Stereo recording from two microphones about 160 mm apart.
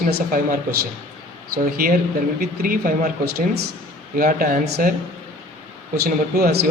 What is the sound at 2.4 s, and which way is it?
Speech, 60° right (ahead or behind).